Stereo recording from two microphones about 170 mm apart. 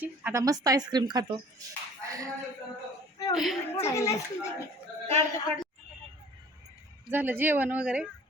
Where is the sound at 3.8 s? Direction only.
15° left (ahead or behind).